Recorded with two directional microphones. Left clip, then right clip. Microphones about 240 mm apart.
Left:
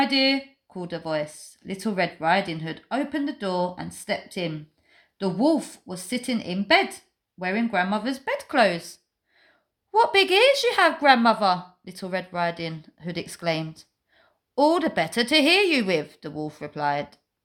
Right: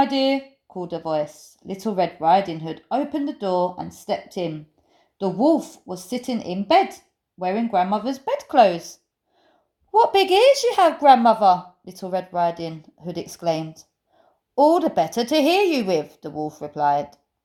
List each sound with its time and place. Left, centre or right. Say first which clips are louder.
0.0 s a woman's voice: right 2 dB; centre
9.9 s a woman's voice: right 3 dB; centre